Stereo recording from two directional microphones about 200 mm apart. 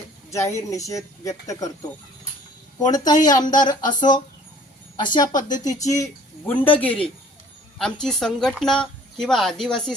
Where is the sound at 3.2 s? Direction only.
20° left (ahead or behind).